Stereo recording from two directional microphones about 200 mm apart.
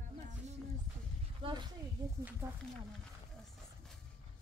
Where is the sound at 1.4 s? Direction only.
25° right (ahead or behind).